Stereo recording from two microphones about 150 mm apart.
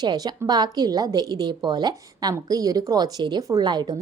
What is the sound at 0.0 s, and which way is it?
A woman's voice, 30° right (ahead or behind).